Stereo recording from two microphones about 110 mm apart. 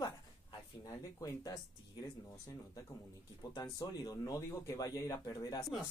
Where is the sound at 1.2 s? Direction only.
35° left (ahead or behind).